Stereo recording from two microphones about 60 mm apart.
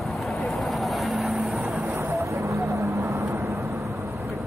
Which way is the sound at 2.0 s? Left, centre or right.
Right.